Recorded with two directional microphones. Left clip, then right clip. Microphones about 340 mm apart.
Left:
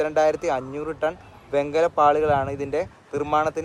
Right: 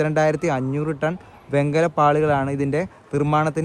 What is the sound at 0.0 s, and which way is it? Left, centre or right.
Speech, right.